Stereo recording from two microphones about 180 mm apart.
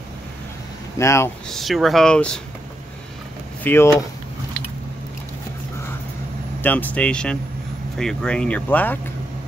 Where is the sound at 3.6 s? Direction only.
15° left (ahead or behind).